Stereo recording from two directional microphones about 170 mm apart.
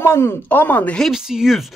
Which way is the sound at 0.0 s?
15° left (ahead or behind).